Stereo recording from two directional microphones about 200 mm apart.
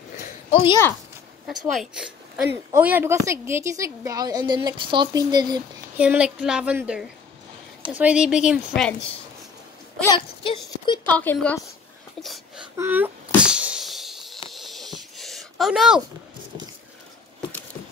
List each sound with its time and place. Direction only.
0.5 s speech: 30° left (ahead or behind)
1.5 s speech: centre (ahead or behind); by 5.6 s 20° right (ahead or behind)
5.9 s a woman's voice: 5° right (ahead or behind)
10.0 s speech: 25° left (ahead or behind)
11.1 s a woman's voice: 10° left (ahead or behind)
12.2 s a sound: centre (ahead or behind)
12.7 s a sound: 10° right (ahead or behind)